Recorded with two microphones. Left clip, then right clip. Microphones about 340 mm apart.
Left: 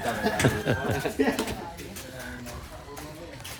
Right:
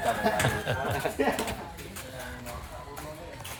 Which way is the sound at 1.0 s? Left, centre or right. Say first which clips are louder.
Left 1 dB; centre.